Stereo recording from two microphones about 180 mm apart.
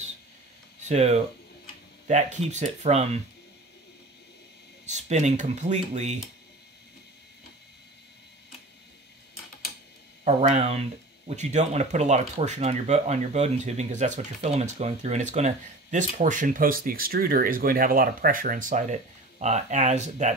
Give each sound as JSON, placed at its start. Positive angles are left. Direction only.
{"t": 0.8, "sound": "speech", "side_deg": -35}
{"t": 4.8, "sound": "speech", "side_deg": -40}
{"t": 10.2, "sound": "speech", "side_deg": -35}